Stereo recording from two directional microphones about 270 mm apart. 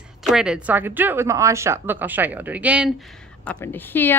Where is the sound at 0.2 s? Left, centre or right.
Centre.